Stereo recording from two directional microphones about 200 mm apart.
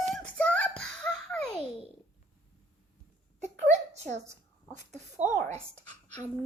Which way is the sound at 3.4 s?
35° right (ahead or behind).